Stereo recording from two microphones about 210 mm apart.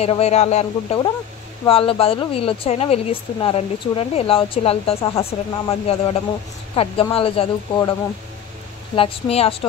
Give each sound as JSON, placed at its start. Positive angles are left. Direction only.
{"t": 0.0, "sound": "speech", "side_deg": 30}
{"t": 8.9, "sound": "speech", "side_deg": 25}